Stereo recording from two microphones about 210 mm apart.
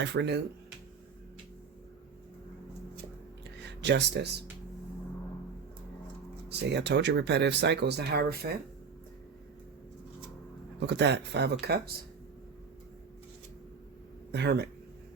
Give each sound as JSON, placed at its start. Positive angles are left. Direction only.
{"t": 0.0, "sound": "speech", "side_deg": -55}
{"t": 3.6, "sound": "speech", "side_deg": -55}
{"t": 6.5, "sound": "speech", "side_deg": -55}
{"t": 10.8, "sound": "speech", "side_deg": -55}
{"t": 14.3, "sound": "speech", "side_deg": -55}